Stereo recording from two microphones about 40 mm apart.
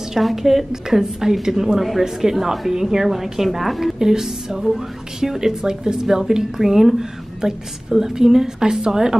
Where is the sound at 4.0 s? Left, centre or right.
Centre.